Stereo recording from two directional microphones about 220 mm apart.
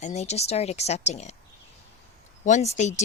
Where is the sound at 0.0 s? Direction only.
30° left (ahead or behind).